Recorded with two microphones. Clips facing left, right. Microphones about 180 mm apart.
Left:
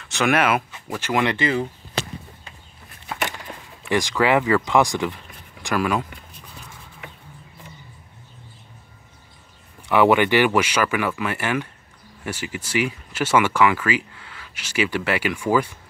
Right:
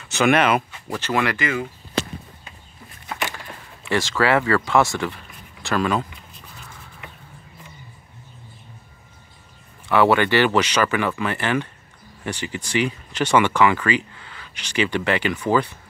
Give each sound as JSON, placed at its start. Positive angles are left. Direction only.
{"t": 0.1, "sound": "speech", "side_deg": 0}
{"t": 1.3, "sound": "speech", "side_deg": 30}
{"t": 3.9, "sound": "speech", "side_deg": 15}
{"t": 9.8, "sound": "speech", "side_deg": 15}